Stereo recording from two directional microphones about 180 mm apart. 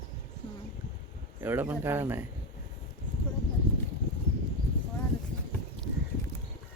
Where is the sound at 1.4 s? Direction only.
15° right (ahead or behind).